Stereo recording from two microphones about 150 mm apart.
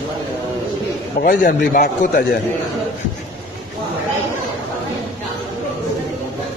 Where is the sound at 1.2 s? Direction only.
90° left.